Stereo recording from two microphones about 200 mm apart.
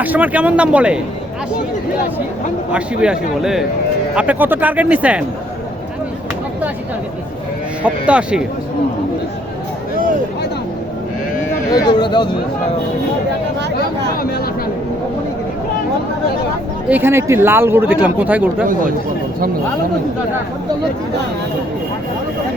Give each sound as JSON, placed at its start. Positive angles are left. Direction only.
{"t": 0.0, "sound": "speech", "side_deg": -10}
{"t": 2.7, "sound": "a man's voice", "side_deg": -5}
{"t": 7.9, "sound": "a man's voice", "side_deg": -5}
{"t": 11.7, "sound": "speech", "side_deg": 20}
{"t": 14.2, "sound": "speech", "side_deg": 50}
{"t": 16.9, "sound": "speech", "side_deg": -10}
{"t": 18.7, "sound": "speech", "side_deg": -45}